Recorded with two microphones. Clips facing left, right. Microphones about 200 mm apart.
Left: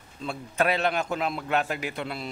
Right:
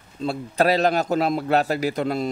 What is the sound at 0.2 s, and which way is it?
A man's voice, 35° right (ahead or behind).